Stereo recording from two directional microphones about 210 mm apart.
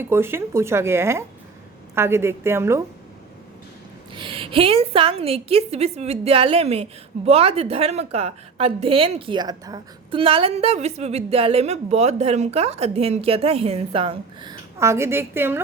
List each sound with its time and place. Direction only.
0.0 s speech: 10° right (ahead or behind)
4.1 s a woman's voice: 25° right (ahead or behind)
14.8 s speech: 15° right (ahead or behind)